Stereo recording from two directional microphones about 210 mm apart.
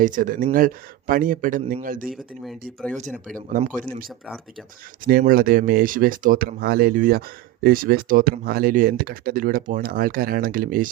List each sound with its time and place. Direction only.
0.0 s speech: 40° right (ahead or behind)
5.0 s speech: 45° right (ahead or behind)